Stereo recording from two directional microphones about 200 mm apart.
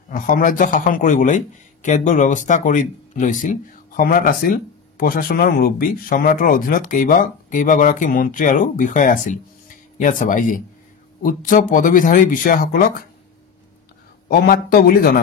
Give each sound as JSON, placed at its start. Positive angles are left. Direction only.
{"t": 0.1, "sound": "a man's voice", "side_deg": 40}
{"t": 14.3, "sound": "speech", "side_deg": 50}